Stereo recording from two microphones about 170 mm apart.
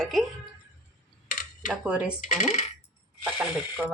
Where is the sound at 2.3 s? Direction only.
45° left (ahead or behind).